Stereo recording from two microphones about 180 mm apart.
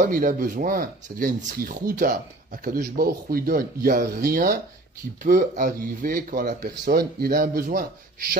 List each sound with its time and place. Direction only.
0.0 s speech: 50° right (ahead or behind)